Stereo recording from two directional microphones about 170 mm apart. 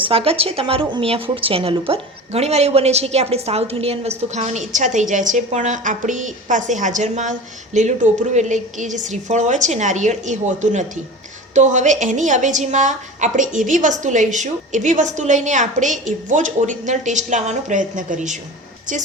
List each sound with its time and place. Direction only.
0.0 s a woman's voice: 35° right (ahead or behind)